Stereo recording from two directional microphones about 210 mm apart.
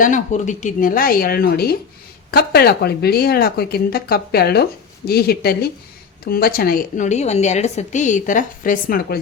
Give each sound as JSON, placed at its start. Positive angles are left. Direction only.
{"t": 0.0, "sound": "a woman's voice", "side_deg": 35}